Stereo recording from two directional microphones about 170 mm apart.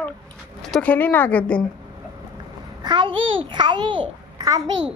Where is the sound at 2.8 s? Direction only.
25° right (ahead or behind).